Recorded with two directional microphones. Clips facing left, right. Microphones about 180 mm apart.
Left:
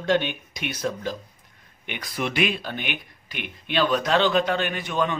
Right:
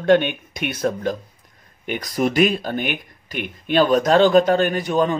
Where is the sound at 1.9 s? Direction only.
40° right (ahead or behind).